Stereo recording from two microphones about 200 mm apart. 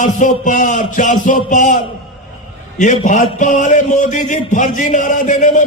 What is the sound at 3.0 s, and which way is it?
A man's voice, 40° left (ahead or behind).